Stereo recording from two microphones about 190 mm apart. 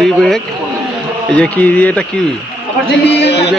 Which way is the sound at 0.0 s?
Centre (ahead or behind).